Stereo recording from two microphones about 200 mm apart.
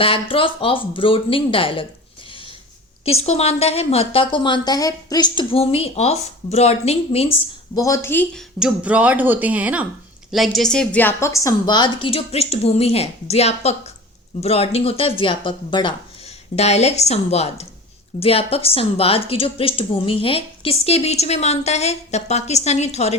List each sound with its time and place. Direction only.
0.0 s a woman's voice: 25° left (ahead or behind)
3.0 s a woman's voice: 30° left (ahead or behind)
7.8 s a woman's voice: 15° left (ahead or behind); by 23.1 s 35° left (ahead or behind)